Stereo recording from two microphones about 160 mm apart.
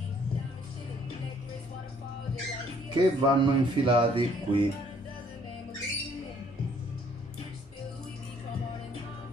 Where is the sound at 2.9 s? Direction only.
30° right (ahead or behind).